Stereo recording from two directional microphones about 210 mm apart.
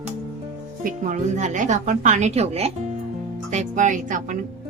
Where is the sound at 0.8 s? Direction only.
40° right (ahead or behind).